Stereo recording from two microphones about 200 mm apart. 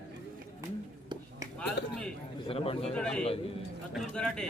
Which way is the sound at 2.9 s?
5° left (ahead or behind).